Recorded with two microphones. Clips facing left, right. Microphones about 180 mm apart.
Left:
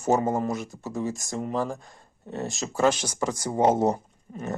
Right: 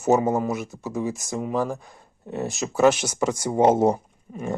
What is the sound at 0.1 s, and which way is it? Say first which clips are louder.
Speech: right 3 dB; 5° right (ahead or behind).